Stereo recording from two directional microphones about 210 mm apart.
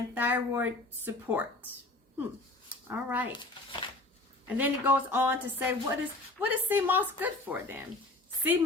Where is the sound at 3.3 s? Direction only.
20° left (ahead or behind).